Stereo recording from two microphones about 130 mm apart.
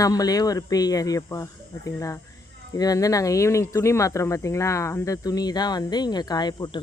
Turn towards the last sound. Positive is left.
turn(degrees=35)  # may be behind; listen again after turning